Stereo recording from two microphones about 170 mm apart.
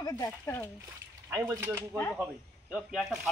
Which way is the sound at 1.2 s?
15° right (ahead or behind).